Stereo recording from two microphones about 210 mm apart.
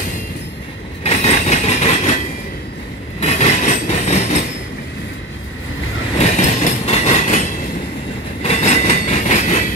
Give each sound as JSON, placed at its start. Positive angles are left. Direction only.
{"t": 1.0, "sound": "train", "side_deg": 30}
{"t": 3.2, "sound": "train", "side_deg": 30}
{"t": 6.1, "sound": "train", "side_deg": 35}